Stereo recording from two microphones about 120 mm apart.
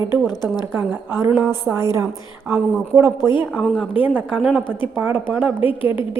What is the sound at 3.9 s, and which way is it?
Speech, 15° right (ahead or behind).